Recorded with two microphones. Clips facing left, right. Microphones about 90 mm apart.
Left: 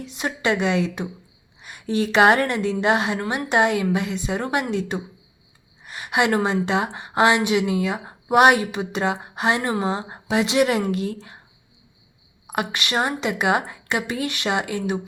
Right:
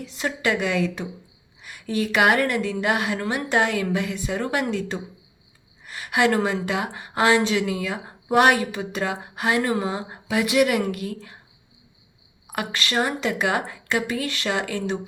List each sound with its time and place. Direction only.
0.0 s a woman's voice: 20° left (ahead or behind)
12.5 s a woman's voice: 20° left (ahead or behind)